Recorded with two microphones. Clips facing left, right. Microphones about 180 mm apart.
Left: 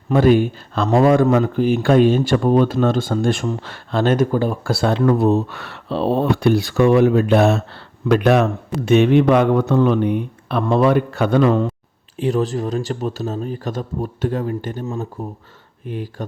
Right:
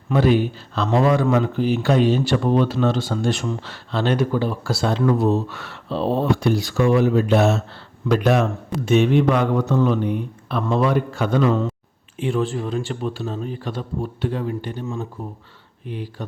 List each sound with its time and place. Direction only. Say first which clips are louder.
0.1 s speech: left 4 dB; 50° left (ahead or behind)
12.1 s speech: left 3 dB; 40° left (ahead or behind)